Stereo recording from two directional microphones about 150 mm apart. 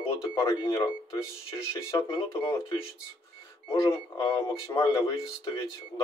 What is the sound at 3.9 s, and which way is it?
Speech, 25° left (ahead or behind).